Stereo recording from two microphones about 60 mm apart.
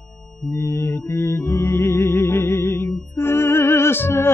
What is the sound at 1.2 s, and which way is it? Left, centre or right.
Music, left.